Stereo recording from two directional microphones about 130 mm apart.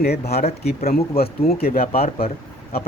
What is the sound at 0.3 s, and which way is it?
Speech, 55° left (ahead or behind).